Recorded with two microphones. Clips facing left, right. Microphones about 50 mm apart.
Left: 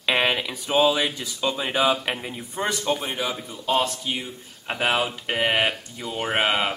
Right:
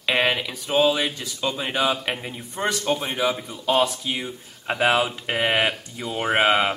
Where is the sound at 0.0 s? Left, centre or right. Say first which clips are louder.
Even; centre.